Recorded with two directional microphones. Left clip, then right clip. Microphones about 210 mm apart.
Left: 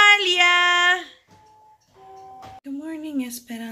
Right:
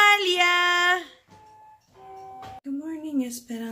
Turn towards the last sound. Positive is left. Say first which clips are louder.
# even
turn(degrees=0)  # may be behind; listen again after turning